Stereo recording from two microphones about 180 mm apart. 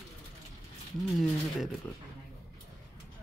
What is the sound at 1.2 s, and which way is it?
Speech, centre (ahead or behind).